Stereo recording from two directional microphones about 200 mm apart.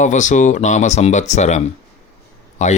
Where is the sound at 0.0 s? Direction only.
40° left (ahead or behind).